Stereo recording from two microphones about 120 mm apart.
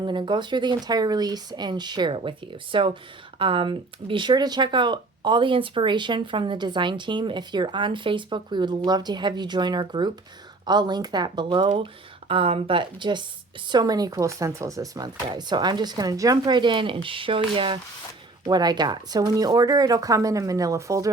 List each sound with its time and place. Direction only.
0.0 s speech: 40° right (ahead or behind)
18.4 s speech: 35° right (ahead or behind)